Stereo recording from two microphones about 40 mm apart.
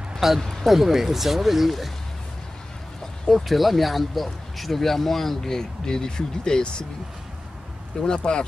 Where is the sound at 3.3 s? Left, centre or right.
Centre.